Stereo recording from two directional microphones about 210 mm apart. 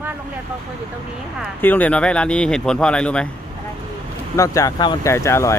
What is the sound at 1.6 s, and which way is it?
Speech, 10° left (ahead or behind).